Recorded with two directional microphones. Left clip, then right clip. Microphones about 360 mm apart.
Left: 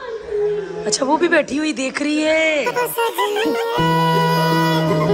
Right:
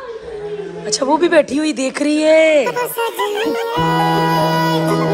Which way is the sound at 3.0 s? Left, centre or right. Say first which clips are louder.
Left 1 dB; left.